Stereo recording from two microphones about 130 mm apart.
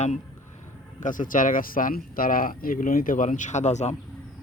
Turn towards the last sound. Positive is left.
turn(degrees=60)  # may be behind; listen again after turning